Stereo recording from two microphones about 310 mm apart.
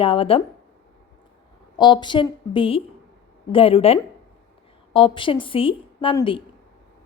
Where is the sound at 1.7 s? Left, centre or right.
Centre.